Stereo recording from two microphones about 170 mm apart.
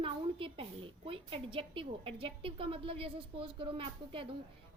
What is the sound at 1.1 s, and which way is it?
A woman's voice, 30° right (ahead or behind).